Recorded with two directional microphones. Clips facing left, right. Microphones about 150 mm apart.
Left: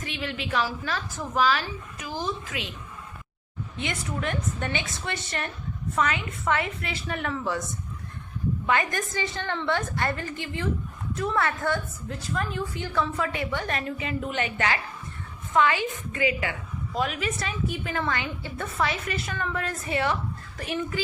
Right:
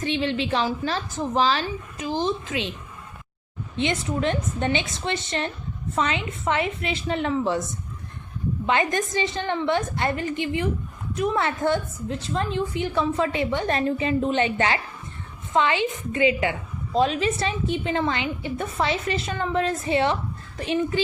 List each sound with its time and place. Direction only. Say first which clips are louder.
0.0 s a woman's voice: right 8 dB; 30° right (ahead or behind)
3.8 s a woman's voice: right 7 dB; 25° right (ahead or behind)
8.6 s a woman's voice: right 4 dB; 25° right (ahead or behind)